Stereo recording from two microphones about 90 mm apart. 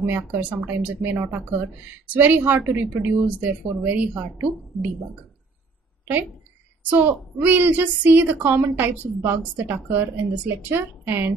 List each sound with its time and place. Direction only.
0.0 s a woman's voice: 25° right (ahead or behind)
6.9 s a woman's voice: 20° right (ahead or behind)